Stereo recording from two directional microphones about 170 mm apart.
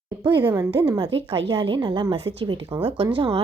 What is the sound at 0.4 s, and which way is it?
Speech, 15° right (ahead or behind).